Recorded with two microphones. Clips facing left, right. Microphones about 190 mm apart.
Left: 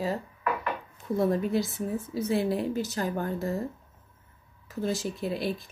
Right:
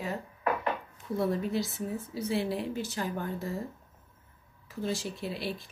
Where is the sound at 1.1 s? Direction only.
50° left (ahead or behind).